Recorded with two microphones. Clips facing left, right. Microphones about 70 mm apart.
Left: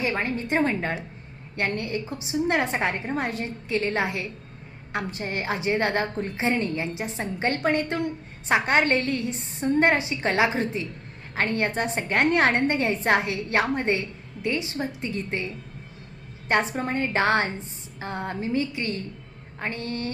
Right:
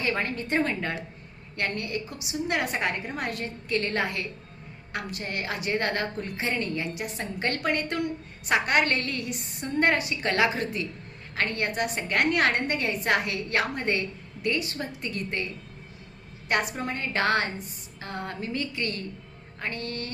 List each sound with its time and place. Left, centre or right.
0.0 s a woman's voice: centre